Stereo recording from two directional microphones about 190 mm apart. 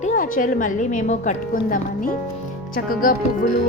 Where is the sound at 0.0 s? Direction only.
45° left (ahead or behind).